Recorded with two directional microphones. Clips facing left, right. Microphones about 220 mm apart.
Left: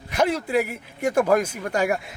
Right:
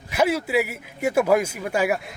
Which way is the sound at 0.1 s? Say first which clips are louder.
Right 1 dB; 5° right (ahead or behind).